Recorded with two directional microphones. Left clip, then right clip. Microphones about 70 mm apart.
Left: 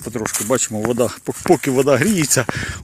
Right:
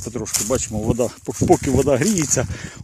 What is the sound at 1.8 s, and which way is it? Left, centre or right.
Speech, centre.